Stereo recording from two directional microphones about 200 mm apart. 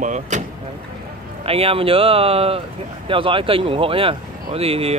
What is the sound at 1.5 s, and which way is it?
Speech, 30° right (ahead or behind).